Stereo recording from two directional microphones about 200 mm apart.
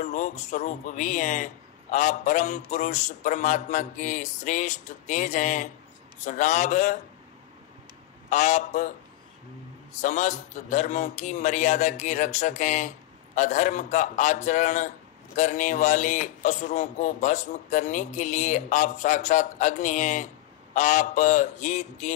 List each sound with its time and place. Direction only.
0.0 s a man's voice: 35° left (ahead or behind)
8.3 s a man's voice: 35° left (ahead or behind)
10.0 s a man's voice: 35° left (ahead or behind)